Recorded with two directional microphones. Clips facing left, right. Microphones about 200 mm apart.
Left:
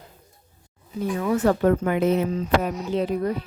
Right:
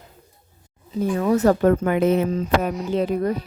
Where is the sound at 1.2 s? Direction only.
40° right (ahead or behind).